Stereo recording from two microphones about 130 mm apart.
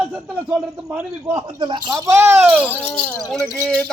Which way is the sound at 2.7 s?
10° left (ahead or behind).